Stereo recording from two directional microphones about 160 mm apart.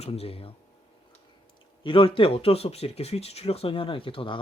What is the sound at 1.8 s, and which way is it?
Speech, 35° left (ahead or behind).